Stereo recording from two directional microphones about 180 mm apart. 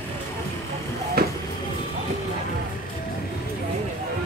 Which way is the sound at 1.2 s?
60° right (ahead or behind).